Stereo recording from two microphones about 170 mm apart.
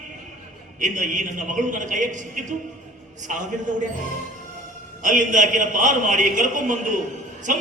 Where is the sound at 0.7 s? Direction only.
50° right (ahead or behind).